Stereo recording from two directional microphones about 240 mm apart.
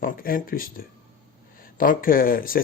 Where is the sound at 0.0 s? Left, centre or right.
Left.